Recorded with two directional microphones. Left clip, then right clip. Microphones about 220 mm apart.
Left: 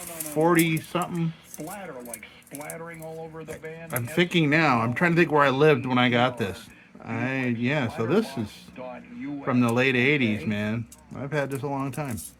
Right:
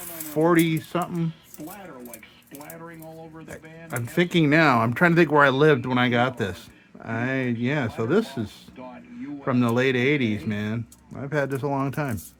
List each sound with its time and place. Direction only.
0.3 s speech: 20° right (ahead or behind)
2.6 s speech: 45° left (ahead or behind)
3.8 s speech: 20° right (ahead or behind)
9.5 s speech: 20° right (ahead or behind)